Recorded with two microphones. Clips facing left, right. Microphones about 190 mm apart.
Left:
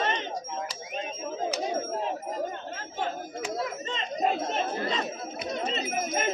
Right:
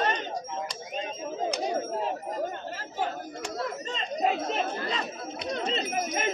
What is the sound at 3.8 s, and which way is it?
Chatter, 40° right (ahead or behind).